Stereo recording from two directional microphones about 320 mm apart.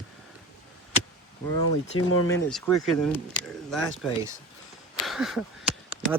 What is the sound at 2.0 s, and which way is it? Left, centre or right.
Speech, left.